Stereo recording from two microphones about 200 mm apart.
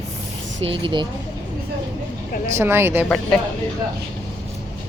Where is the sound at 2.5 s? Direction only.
10° right (ahead or behind).